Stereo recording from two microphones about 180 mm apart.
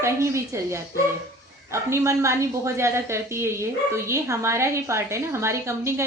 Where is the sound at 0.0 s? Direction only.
15° right (ahead or behind).